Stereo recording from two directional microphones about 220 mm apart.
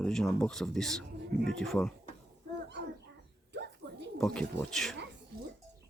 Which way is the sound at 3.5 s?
50° right (ahead or behind).